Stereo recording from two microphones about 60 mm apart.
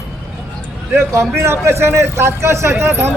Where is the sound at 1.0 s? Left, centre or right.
Right.